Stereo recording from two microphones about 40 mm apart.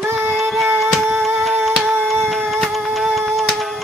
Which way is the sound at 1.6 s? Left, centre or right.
Centre.